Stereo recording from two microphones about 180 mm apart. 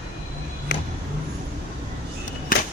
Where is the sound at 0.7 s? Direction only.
90° left.